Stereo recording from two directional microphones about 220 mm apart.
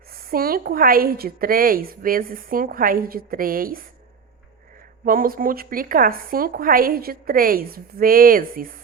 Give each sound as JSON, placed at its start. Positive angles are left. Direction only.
{"t": 0.1, "sound": "a woman's voice", "side_deg": -40}
{"t": 5.0, "sound": "a woman's voice", "side_deg": -40}